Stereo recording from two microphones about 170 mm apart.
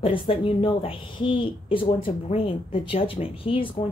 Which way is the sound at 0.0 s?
30° left (ahead or behind).